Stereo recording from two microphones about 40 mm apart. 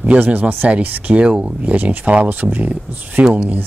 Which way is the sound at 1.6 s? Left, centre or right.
Right.